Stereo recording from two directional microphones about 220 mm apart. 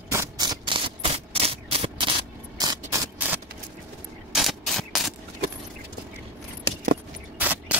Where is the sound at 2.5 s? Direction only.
15° right (ahead or behind).